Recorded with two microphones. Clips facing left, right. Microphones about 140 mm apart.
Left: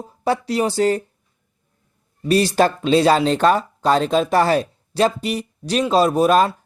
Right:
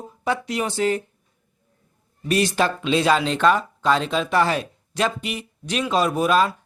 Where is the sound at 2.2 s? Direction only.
35° left (ahead or behind).